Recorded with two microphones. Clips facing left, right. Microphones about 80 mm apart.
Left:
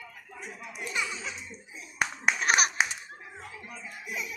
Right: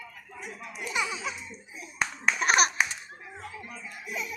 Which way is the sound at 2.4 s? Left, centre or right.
Centre.